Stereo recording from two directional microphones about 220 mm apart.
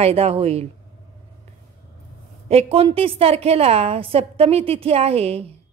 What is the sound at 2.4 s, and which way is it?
A woman's voice, 25° right (ahead or behind).